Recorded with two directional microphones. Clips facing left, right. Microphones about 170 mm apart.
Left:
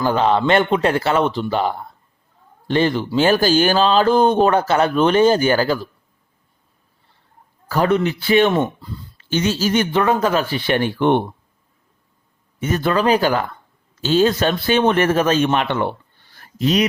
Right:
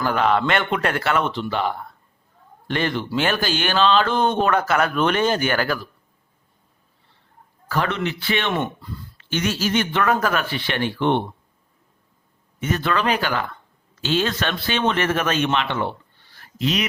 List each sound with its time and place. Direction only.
0.0 s speech: 30° left (ahead or behind)
7.7 s speech: 40° left (ahead or behind); by 10.4 s 25° left (ahead or behind)
10.5 s speech: 45° left (ahead or behind)
12.5 s speech: 40° left (ahead or behind)
16.4 s a sound: 40° left (ahead or behind)